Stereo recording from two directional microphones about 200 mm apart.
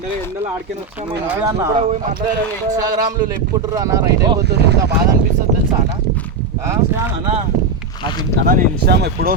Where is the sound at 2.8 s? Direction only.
20° right (ahead or behind).